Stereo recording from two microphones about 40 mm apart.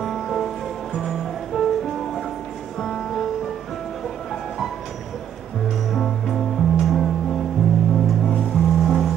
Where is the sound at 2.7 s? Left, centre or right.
Centre.